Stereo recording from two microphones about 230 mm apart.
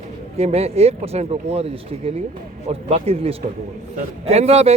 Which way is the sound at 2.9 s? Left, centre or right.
Right.